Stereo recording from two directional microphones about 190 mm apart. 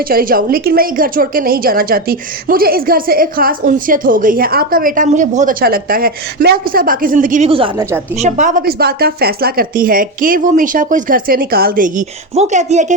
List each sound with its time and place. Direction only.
0.0 s a woman's voice: 50° right (ahead or behind)
7.5 s a woman's voice: 30° right (ahead or behind)
8.1 s a woman's voice: 40° right (ahead or behind)